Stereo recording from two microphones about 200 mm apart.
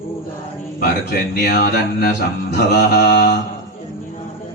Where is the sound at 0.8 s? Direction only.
50° left (ahead or behind).